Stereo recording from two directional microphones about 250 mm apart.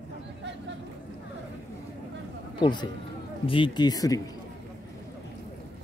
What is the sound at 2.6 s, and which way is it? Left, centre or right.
Speech, centre.